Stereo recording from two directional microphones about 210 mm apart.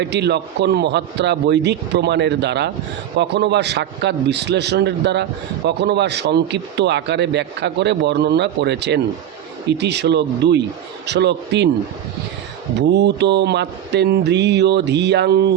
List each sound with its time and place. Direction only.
0.0 s a man's voice: 55° right (ahead or behind)
12.9 s a man's voice: 55° right (ahead or behind)